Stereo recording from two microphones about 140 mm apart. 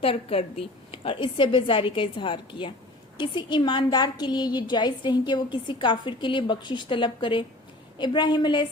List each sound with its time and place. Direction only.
0.0 s a woman's voice: 45° left (ahead or behind)